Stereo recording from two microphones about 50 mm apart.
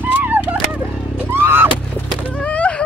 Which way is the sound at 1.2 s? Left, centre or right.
Right.